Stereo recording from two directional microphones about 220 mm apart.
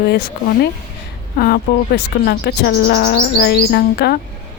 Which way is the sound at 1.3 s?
45° left (ahead or behind).